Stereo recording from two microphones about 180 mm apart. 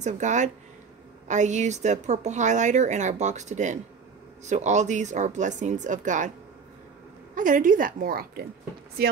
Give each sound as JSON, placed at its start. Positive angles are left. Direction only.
{"t": 0.0, "sound": "a woman's voice", "side_deg": -40}
{"t": 7.3, "sound": "speech", "side_deg": -45}